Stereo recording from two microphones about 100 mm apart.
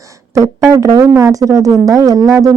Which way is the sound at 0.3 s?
30° right (ahead or behind).